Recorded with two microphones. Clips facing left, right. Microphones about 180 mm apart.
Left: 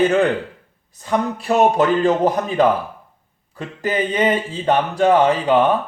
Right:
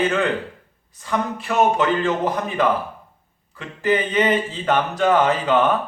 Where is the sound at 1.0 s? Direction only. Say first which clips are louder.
Left 3 dB; 35° left (ahead or behind).